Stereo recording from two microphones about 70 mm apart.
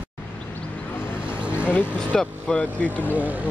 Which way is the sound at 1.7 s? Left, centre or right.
Left.